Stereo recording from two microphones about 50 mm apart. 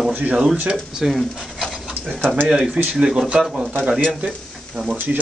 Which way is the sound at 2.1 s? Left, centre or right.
Right.